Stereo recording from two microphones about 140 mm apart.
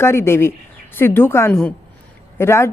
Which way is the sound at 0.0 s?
15° left (ahead or behind).